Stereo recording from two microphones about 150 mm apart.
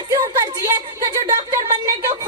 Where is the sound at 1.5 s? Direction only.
25° right (ahead or behind).